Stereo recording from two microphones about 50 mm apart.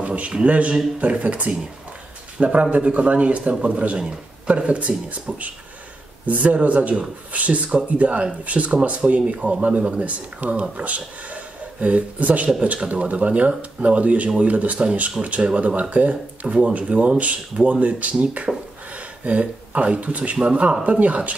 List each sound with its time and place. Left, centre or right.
0.0 s speech: right